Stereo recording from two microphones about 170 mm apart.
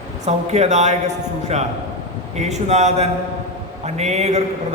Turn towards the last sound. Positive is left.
turn(degrees=-40)  # may be behind; listen again after turning